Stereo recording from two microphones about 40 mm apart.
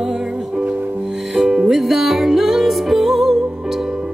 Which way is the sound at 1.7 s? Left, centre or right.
Centre.